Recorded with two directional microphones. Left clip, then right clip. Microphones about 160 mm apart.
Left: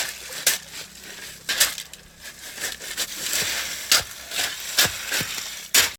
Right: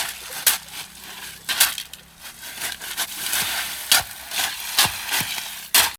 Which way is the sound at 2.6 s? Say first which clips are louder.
Right 1 dB; 15° right (ahead or behind).